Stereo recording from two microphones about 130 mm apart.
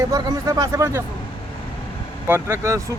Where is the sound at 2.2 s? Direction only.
15° right (ahead or behind).